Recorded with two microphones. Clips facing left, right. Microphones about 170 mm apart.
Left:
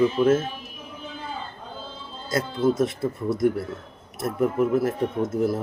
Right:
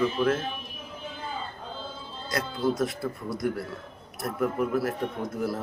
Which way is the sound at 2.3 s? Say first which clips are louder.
Left 5 dB; 25° left (ahead or behind).